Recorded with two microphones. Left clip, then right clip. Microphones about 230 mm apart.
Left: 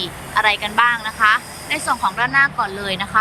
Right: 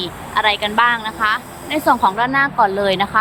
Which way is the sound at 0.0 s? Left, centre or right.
Centre.